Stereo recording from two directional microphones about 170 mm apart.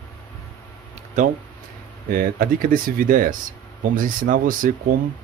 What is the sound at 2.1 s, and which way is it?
Speech, 60° right (ahead or behind).